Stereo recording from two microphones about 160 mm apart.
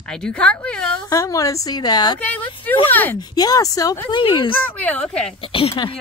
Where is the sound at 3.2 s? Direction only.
25° left (ahead or behind).